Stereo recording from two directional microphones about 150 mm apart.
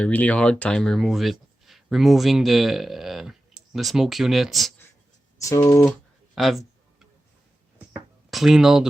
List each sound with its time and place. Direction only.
0.0 s speech: 10° left (ahead or behind)
5.4 s speech: 20° left (ahead or behind)
6.3 s a sound: centre (ahead or behind)
8.3 s speech: centre (ahead or behind)